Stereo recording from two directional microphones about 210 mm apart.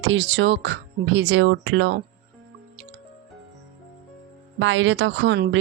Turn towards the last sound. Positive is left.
turn(degrees=-55)  # may be behind; listen again after turning